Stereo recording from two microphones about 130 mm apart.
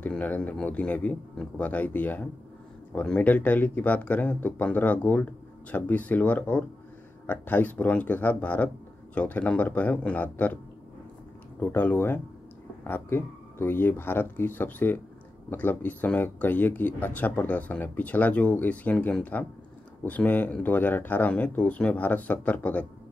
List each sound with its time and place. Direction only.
0.0 s speech: 15° left (ahead or behind)
11.6 s speech: 15° left (ahead or behind)